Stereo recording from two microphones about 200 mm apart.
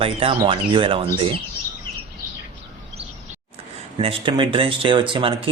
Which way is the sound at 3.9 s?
25° right (ahead or behind).